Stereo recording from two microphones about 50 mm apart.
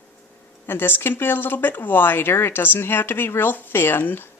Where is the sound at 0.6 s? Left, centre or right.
Left.